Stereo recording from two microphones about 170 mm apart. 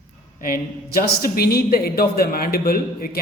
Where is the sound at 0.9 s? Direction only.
65° left (ahead or behind).